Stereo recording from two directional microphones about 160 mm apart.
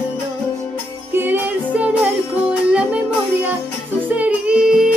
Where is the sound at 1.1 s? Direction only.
15° right (ahead or behind).